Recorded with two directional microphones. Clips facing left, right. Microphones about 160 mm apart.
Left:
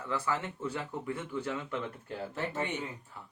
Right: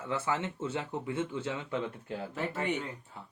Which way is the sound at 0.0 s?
25° right (ahead or behind).